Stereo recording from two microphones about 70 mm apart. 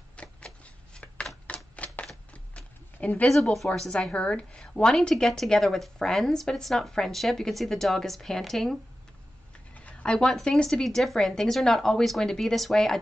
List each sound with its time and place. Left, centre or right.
0.1 s shuffling cards: centre
1.3 s typewriter: centre
1.8 s typewriter: centre
2.3 s a sound: centre
3.5 s a woman's voice: centre
9.8 s a sound: centre
10.3 s a woman's voice: centre